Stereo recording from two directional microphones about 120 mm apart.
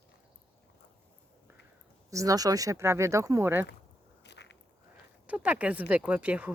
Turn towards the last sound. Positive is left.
turn(degrees=-10)  # may be behind; listen again after turning